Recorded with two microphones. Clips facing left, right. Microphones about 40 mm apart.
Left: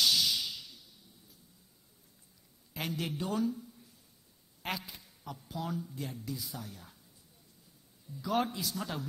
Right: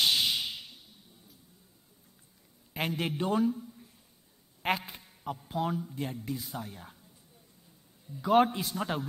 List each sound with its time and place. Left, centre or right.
0.0 s a sound: right
2.7 s speech: right
4.6 s speech: right
8.1 s speech: right